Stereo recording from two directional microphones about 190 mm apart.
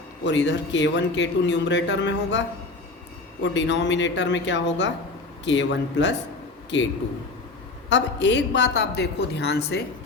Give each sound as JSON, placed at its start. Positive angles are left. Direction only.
{"t": 0.3, "sound": "speech", "side_deg": 70}
{"t": 3.4, "sound": "speech", "side_deg": 70}